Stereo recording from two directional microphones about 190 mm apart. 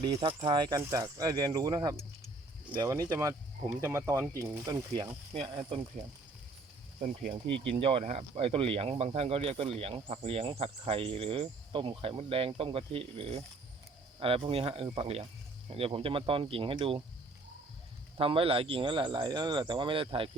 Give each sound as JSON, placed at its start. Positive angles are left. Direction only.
{"t": 0.0, "sound": "speech", "side_deg": -25}
{"t": 5.3, "sound": "speech", "side_deg": -30}
{"t": 7.0, "sound": "speech", "side_deg": -45}
{"t": 7.5, "sound": "speech", "side_deg": -30}
{"t": 18.2, "sound": "speech", "side_deg": -30}